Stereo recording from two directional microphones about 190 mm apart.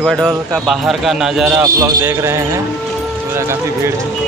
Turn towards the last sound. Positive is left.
turn(degrees=-15)  # may be behind; listen again after turning